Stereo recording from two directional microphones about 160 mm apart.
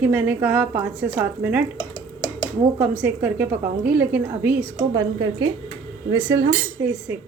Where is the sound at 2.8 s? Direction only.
10° right (ahead or behind).